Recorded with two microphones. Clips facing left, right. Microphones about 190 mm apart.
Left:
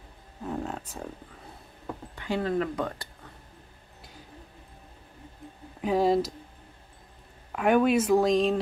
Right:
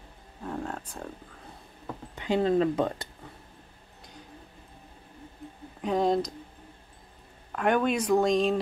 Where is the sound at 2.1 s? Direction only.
20° right (ahead or behind).